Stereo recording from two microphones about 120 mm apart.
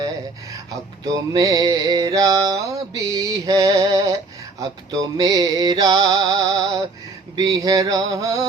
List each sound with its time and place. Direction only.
1.1 s music: 30° right (ahead or behind)